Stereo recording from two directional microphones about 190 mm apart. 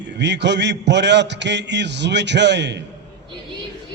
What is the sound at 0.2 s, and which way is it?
A man's voice, 65° right (ahead or behind).